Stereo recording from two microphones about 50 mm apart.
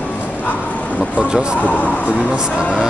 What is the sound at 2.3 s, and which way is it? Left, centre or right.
Speech, centre.